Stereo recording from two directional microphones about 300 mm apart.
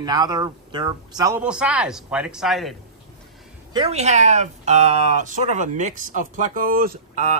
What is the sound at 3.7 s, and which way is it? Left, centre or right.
Speech, centre.